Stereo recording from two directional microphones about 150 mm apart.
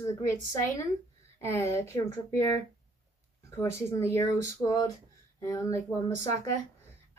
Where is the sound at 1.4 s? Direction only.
20° left (ahead or behind).